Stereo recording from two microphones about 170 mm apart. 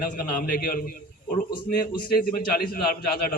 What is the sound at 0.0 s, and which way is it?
A man's voice, 55° left (ahead or behind).